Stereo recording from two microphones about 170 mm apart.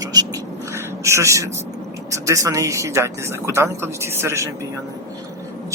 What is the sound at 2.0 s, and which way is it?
Speech, 20° right (ahead or behind).